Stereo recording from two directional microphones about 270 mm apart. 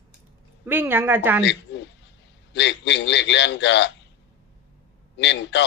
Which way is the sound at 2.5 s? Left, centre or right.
Left.